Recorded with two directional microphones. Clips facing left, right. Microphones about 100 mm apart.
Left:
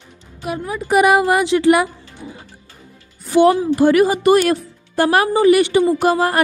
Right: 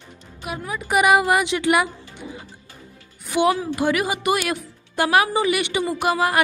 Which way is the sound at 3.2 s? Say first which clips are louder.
Left 7 dB; 35° left (ahead or behind).